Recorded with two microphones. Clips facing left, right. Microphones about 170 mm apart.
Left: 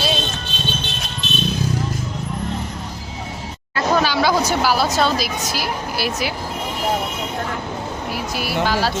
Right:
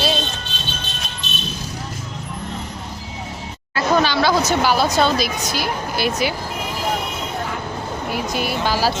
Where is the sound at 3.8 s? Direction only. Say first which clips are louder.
Right 1 dB; 5° left (ahead or behind).